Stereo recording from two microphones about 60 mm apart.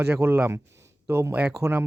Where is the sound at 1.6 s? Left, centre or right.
Right.